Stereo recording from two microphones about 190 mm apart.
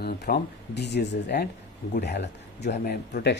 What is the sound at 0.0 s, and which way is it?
A woman's voice, 60° left (ahead or behind).